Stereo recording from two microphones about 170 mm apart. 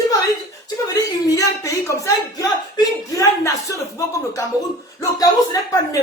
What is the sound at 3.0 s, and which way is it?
Speech, 20° left (ahead or behind).